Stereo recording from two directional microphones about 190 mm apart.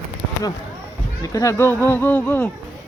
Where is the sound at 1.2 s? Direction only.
15° left (ahead or behind).